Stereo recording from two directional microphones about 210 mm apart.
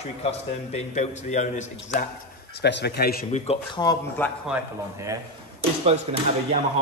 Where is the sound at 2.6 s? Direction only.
55° left (ahead or behind).